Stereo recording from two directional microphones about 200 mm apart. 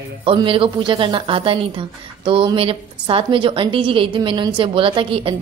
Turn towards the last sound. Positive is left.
turn(degrees=-25)  # may be behind; listen again after turning